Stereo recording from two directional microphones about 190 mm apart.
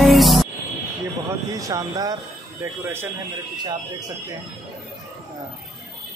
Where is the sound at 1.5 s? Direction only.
20° right (ahead or behind).